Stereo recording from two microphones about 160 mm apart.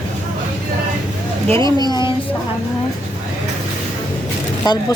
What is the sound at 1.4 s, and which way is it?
Speech, 30° right (ahead or behind).